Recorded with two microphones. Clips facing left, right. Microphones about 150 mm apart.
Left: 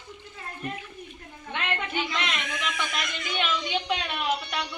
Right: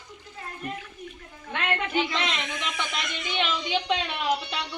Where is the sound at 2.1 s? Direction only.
30° right (ahead or behind).